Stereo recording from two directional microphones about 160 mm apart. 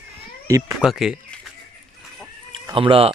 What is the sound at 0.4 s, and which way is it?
Speech, 20° right (ahead or behind).